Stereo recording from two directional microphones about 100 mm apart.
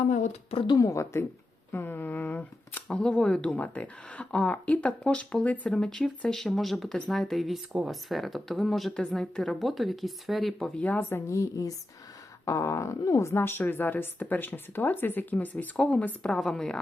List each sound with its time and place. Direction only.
0.5 s a woman's voice: 60° left (ahead or behind)
0.8 s a sound: 30° left (ahead or behind)
1.7 s speech: 20° left (ahead or behind); by 10.7 s centre (ahead or behind)
10.8 s speech: 15° left (ahead or behind)
11.3 s a sound: 30° left (ahead or behind)
13.0 s a woman's voice: 30° left (ahead or behind); by 16.7 s 5° left (ahead or behind)